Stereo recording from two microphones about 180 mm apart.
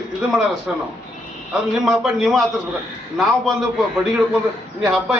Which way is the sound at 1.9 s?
Centre (ahead or behind).